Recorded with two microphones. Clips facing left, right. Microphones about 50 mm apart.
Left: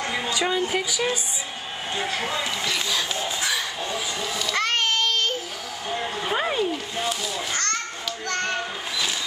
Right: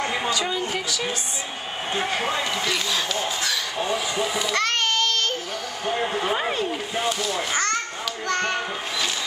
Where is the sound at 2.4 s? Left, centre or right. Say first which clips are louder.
Right 2 dB; centre.